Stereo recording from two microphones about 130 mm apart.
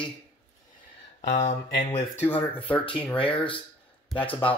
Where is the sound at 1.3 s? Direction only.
55° left (ahead or behind).